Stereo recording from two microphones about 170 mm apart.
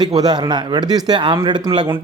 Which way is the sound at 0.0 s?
25° right (ahead or behind).